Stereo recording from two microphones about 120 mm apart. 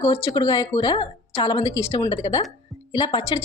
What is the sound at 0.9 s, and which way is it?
Speech, 45° left (ahead or behind).